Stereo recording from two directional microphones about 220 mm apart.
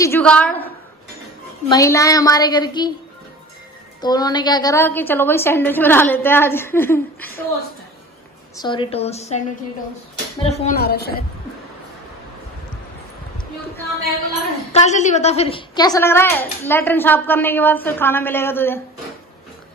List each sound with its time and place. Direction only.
0.0 s a woman's voice: 10° left (ahead or behind)
1.7 s a woman's voice: 15° left (ahead or behind)
4.0 s a woman's voice: 20° left (ahead or behind)
8.5 s a woman's voice: 20° left (ahead or behind)
10.4 s a woman's voice: 30° left (ahead or behind)
10.8 s a woman's voice: 45° left (ahead or behind)
14.7 s a woman's voice: 30° left (ahead or behind); by 18.8 s 10° left (ahead or behind)